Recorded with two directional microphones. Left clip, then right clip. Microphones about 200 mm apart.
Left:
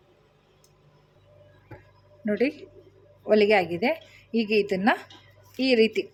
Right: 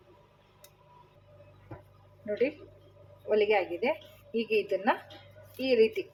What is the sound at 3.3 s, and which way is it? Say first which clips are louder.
Speech: left 6 dB; 45° left (ahead or behind).